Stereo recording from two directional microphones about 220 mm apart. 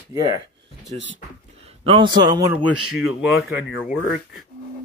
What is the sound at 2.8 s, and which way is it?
Speech, centre (ahead or behind).